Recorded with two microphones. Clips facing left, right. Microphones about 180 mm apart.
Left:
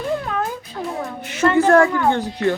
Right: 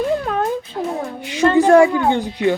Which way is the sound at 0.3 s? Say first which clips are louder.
Right 3 dB; 40° right (ahead or behind).